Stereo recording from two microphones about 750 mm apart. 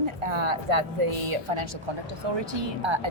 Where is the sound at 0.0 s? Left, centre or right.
Right.